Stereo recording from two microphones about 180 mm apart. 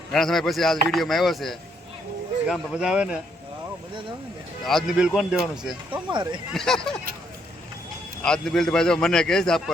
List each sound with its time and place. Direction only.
0.1 s speech: centre (ahead or behind)
4.6 s speech: centre (ahead or behind)
5.9 s speech: 25° right (ahead or behind)
6.5 s speech: centre (ahead or behind)
8.2 s speech: 5° left (ahead or behind)